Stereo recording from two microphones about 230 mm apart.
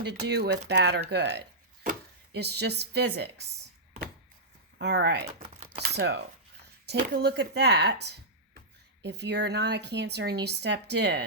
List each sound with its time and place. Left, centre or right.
0.1 s speech: right
4.8 s speech: right
5.5 s a sound: right
6.0 s speech: right